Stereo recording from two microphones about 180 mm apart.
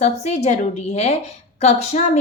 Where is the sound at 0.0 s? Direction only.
40° left (ahead or behind).